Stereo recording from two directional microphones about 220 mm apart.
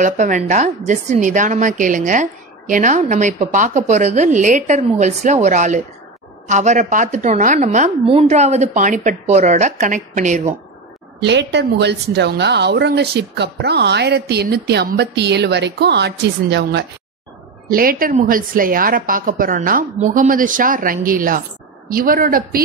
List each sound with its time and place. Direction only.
0.0 s a woman's voice: 35° right (ahead or behind)
11.1 s a woman's voice: 50° right (ahead or behind)